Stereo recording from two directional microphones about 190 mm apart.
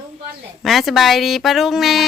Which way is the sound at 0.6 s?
Centre (ahead or behind).